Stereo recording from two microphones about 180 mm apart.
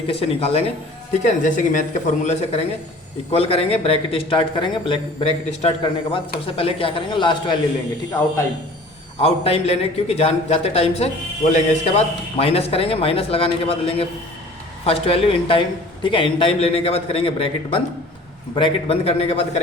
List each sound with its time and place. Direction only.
0.1 s speech: 35° left (ahead or behind)
9.2 s speech: 35° left (ahead or behind)